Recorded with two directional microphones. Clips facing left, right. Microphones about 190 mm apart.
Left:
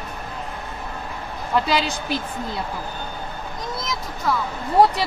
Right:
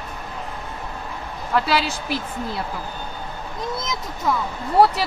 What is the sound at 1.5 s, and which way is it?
Speech, 5° right (ahead or behind).